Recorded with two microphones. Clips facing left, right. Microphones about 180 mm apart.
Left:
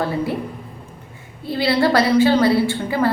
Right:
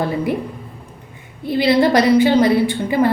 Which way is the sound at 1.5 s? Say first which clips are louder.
Right 3 dB; 20° right (ahead or behind).